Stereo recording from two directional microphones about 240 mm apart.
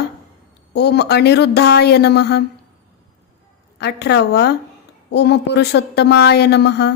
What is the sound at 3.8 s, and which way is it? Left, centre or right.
Speech, left.